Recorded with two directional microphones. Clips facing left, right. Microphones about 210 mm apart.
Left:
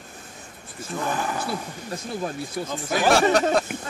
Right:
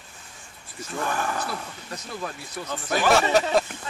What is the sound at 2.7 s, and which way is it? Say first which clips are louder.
Speech: left 1 dB; 5° left (ahead or behind).